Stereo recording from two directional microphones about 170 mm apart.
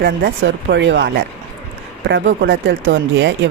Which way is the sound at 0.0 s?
90° right.